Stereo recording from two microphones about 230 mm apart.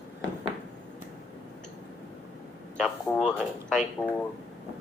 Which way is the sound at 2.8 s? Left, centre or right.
Centre.